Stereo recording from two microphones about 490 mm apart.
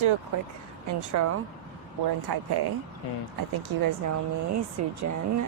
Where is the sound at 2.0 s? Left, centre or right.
Right.